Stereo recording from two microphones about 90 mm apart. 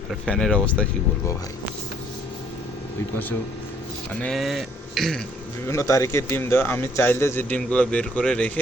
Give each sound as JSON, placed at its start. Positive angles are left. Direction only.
{"t": 0.3, "sound": "speech", "side_deg": 10}
{"t": 4.1, "sound": "speech", "side_deg": 15}
{"t": 4.4, "sound": "speech", "side_deg": 0}
{"t": 5.6, "sound": "speech", "side_deg": 35}
{"t": 7.5, "sound": "speech", "side_deg": 15}